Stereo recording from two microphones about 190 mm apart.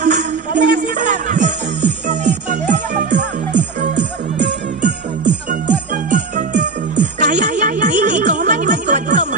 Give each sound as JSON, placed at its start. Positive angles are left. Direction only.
{"t": 0.0, "sound": "music", "side_deg": -40}
{"t": 4.0, "sound": "music", "side_deg": -65}
{"t": 5.5, "sound": "jingle bell", "side_deg": -40}